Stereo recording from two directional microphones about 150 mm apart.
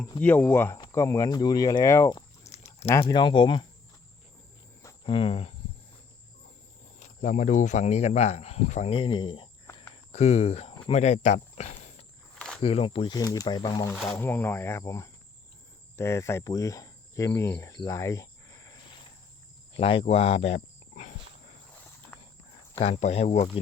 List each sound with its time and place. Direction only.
0.2 s speech: 10° left (ahead or behind)
2.5 s a sound: 45° left (ahead or behind)
3.0 s speech: 30° left (ahead or behind)
5.0 s speech: 40° left (ahead or behind)
7.0 s speech: 55° left (ahead or behind)
9.0 s speech: 35° left (ahead or behind)
10.1 s speech: 45° left (ahead or behind)
12.4 s a sound: 5° left (ahead or behind)
12.6 s speech: 40° left (ahead or behind)
14.1 s speech: 15° left (ahead or behind)
19.7 s speech: 35° left (ahead or behind)
22.8 s speech: 45° left (ahead or behind)